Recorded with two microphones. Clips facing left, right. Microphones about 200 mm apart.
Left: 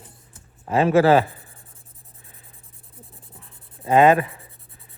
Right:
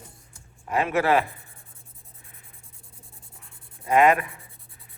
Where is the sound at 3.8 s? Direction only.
30° left (ahead or behind).